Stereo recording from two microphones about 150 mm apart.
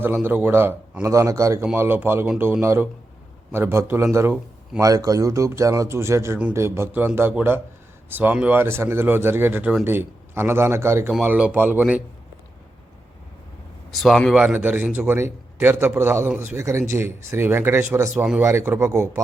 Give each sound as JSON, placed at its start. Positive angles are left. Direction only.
{"t": 0.0, "sound": "speech", "side_deg": -15}
{"t": 13.9, "sound": "speech", "side_deg": 0}
{"t": 14.4, "sound": "speech", "side_deg": -10}